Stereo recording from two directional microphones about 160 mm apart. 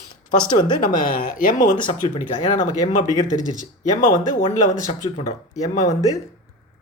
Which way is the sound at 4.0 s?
50° left (ahead or behind).